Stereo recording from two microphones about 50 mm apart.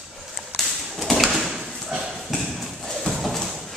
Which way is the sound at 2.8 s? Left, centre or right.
Centre.